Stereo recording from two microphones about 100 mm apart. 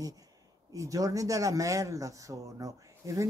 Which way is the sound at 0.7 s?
35° right (ahead or behind).